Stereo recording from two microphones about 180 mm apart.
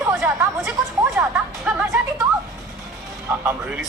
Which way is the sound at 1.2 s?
10° right (ahead or behind).